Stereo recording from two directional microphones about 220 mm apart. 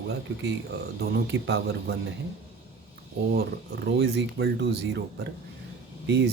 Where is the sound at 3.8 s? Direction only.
50° right (ahead or behind).